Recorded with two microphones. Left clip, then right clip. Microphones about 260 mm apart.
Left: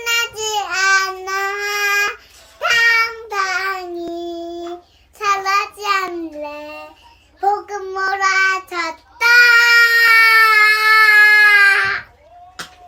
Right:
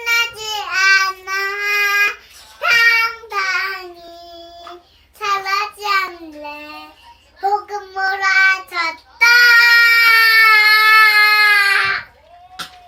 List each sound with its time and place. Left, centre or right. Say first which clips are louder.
0.0 s child singing: right 1 dB; left
5.2 s child singing: left 2 dB; centre
7.9 s child singing: right 1 dB; centre
12.6 s a sound: right 2 dB; centre